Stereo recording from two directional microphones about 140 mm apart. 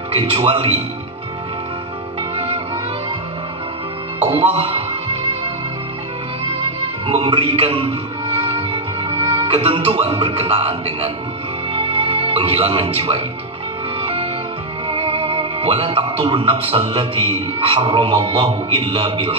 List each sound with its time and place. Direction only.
0.1 s music: 45° right (ahead or behind)
2.3 s music: 45° right (ahead or behind)
4.3 s music: 45° right (ahead or behind)
7.1 s music: 40° right (ahead or behind)
14.9 s music: 40° right (ahead or behind)
16.3 s speech: 45° right (ahead or behind)